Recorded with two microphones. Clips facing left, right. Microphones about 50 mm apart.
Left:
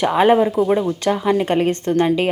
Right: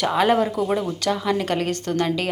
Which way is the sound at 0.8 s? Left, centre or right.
Left.